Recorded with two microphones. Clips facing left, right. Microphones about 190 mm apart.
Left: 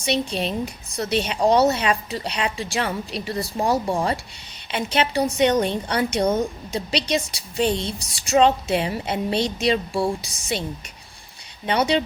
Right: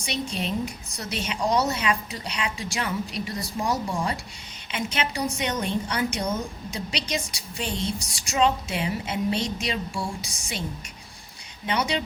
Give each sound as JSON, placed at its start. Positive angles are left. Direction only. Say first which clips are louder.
{"t": 0.0, "sound": "a woman's voice", "louder": "left 6 dB", "side_deg": 30}
{"t": 11.6, "sound": "a woman's voice", "louder": "left 6 dB", "side_deg": 35}